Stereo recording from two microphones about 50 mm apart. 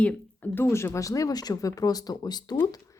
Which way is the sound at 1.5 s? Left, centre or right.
Left.